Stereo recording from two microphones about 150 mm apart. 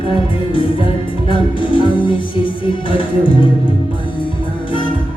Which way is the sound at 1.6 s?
35° left (ahead or behind).